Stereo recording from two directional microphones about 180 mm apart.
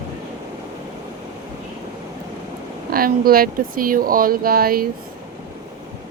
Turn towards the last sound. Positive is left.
turn(degrees=-55)  # may be behind; listen again after turning